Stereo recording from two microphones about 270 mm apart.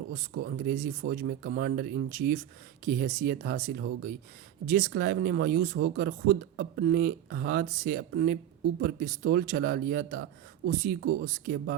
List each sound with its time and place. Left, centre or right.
0.1 s speech: right